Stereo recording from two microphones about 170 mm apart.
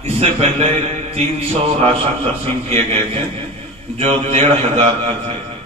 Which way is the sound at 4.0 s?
35° right (ahead or behind).